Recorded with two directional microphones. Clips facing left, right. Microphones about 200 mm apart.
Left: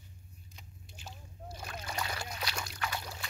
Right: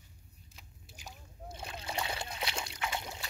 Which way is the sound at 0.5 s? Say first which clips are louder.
Left 1 dB; 10° right (ahead or behind).